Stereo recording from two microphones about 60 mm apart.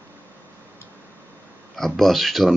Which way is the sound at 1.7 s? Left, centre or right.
Centre.